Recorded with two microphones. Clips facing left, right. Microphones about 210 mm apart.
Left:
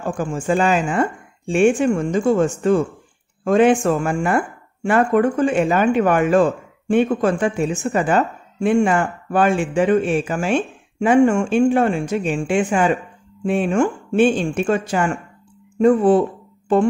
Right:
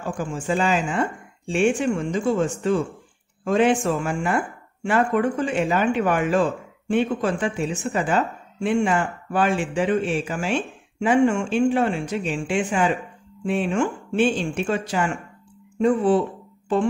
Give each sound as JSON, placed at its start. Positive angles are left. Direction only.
{"t": 0.0, "sound": "speech", "side_deg": 45}